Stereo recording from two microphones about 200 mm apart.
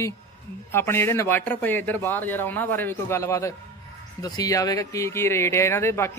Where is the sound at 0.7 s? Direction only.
10° left (ahead or behind).